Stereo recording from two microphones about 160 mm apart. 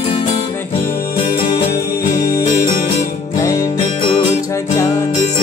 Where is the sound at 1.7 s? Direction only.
20° left (ahead or behind).